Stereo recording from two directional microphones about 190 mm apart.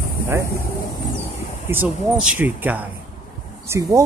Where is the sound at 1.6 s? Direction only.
10° right (ahead or behind).